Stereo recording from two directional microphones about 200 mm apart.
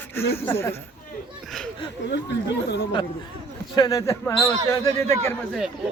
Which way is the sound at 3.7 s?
20° left (ahead or behind).